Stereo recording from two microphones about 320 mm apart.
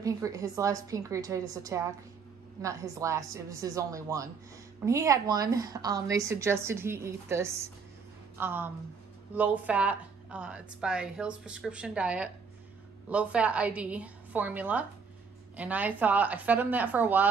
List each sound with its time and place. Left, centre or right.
0.0 s a woman's voice: centre